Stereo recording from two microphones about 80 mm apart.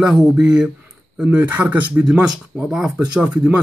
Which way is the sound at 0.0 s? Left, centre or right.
Centre.